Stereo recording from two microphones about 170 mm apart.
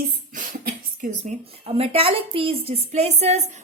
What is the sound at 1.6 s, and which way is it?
A woman's voice, 35° right (ahead or behind).